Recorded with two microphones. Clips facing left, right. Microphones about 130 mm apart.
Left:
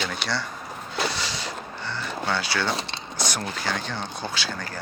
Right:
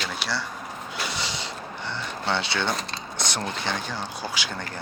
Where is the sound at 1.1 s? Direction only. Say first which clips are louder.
Left 1 dB; 20° right (ahead or behind).